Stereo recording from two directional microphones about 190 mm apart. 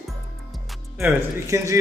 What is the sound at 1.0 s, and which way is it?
Speech, 15° right (ahead or behind).